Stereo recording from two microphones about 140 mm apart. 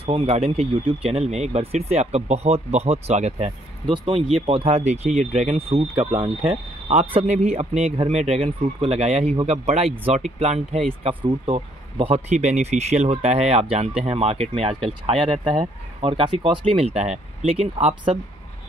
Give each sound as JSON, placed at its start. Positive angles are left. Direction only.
{"t": 0.0, "sound": "speech", "side_deg": -45}
{"t": 3.8, "sound": "speech", "side_deg": -40}
{"t": 5.7, "sound": "speech", "side_deg": -45}
{"t": 11.1, "sound": "speech", "side_deg": -35}
{"t": 12.0, "sound": "speech", "side_deg": -50}